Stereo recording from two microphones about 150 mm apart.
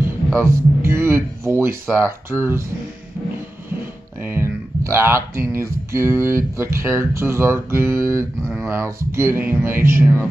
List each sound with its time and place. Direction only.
0.4 s speech: 15° right (ahead or behind)
4.2 s speech: 15° right (ahead or behind)